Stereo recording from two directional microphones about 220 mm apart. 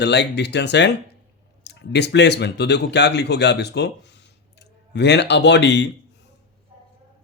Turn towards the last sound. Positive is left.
turn(degrees=50)  # may be behind; listen again after turning